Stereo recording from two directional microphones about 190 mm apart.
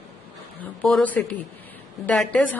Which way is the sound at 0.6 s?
5° left (ahead or behind).